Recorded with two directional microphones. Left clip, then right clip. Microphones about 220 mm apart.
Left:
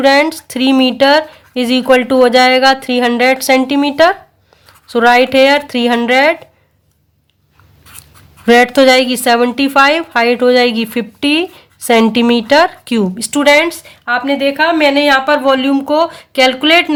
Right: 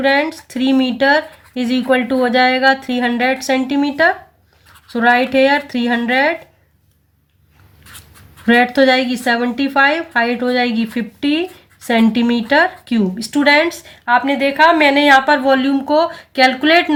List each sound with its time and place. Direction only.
0.0 s speech: 40° left (ahead or behind)
8.4 s speech: 40° left (ahead or behind)